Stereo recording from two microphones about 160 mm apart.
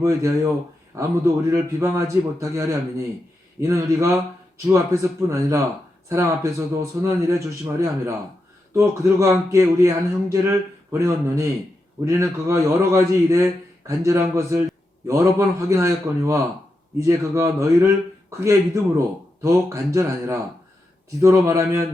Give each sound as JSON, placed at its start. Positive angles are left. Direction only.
{"t": 0.0, "sound": "a man's voice", "side_deg": -20}